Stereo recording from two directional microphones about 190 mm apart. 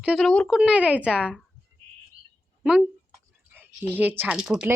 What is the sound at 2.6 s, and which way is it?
Speech, centre (ahead or behind).